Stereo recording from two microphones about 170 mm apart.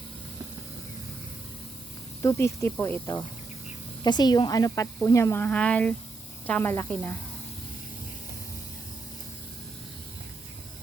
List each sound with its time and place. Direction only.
2.2 s speech: 15° left (ahead or behind)
4.0 s speech: 25° left (ahead or behind)